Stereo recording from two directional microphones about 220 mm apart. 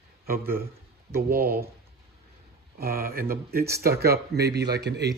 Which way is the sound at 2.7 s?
45° right (ahead or behind).